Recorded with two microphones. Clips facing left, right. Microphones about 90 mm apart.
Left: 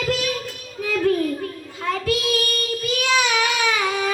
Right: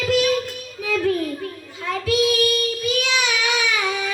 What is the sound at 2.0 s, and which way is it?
Child singing, 45° left (ahead or behind).